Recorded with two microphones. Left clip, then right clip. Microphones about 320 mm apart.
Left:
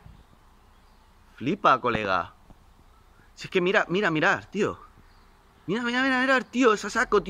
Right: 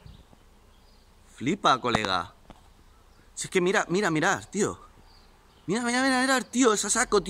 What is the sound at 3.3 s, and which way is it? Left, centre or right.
Speech, centre.